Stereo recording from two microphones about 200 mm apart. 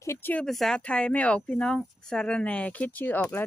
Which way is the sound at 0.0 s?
10° left (ahead or behind).